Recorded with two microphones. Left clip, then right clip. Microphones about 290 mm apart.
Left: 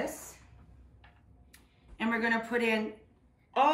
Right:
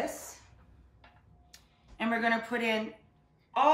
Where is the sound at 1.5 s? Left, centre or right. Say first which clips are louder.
Right 1 dB; centre.